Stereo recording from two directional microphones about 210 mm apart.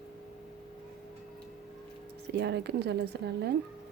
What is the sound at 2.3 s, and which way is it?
Speech, 55° right (ahead or behind).